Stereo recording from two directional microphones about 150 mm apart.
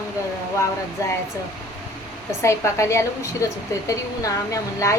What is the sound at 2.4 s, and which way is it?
A woman's voice, 20° left (ahead or behind).